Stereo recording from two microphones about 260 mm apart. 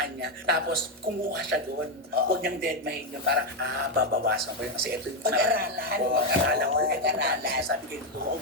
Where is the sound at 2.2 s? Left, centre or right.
Right.